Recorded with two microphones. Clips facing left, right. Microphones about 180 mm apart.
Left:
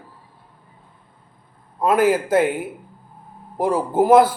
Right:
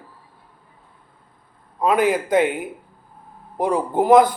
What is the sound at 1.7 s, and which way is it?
A man's voice, 5° left (ahead or behind).